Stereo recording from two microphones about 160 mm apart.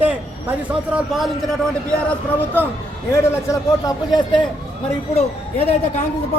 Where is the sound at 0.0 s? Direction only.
10° right (ahead or behind).